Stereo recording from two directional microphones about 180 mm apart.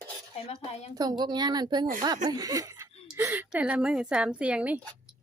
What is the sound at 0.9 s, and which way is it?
A woman's voice, 25° right (ahead or behind).